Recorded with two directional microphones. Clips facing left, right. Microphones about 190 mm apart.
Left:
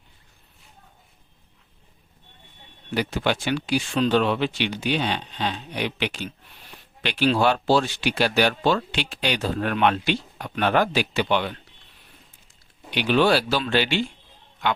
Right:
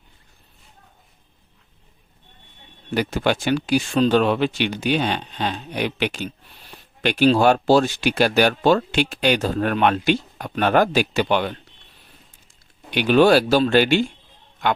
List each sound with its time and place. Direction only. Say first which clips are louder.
2.9 s speech: right 3 dB; 45° right (ahead or behind)
12.9 s speech: right 5 dB; 50° right (ahead or behind)